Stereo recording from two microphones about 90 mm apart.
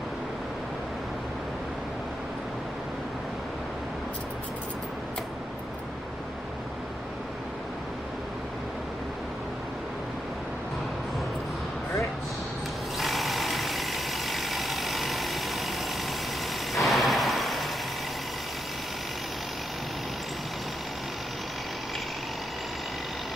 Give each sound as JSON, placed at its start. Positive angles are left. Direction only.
{"t": 12.9, "sound": "vehicle", "side_deg": 0}
{"t": 16.7, "sound": "vehicle", "side_deg": 0}